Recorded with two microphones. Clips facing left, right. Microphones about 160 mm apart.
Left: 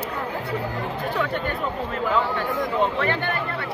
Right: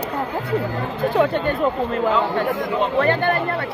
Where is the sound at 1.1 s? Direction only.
40° right (ahead or behind).